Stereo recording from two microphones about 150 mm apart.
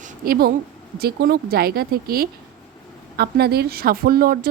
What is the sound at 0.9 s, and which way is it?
A woman's voice, 90° right.